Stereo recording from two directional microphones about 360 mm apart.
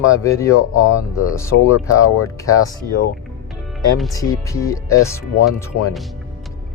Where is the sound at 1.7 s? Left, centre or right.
Left.